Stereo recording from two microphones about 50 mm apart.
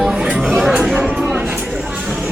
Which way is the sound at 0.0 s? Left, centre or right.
Centre.